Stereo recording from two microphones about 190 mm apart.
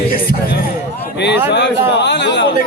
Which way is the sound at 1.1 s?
65° left (ahead or behind).